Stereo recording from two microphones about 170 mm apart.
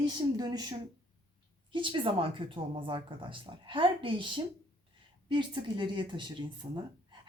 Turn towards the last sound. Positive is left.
turn(degrees=-35)  # may be behind; listen again after turning